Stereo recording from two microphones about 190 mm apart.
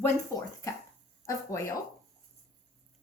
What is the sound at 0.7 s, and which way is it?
Speech, 15° left (ahead or behind).